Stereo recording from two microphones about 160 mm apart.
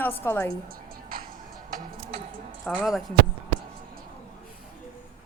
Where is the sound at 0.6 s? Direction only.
65° right (ahead or behind).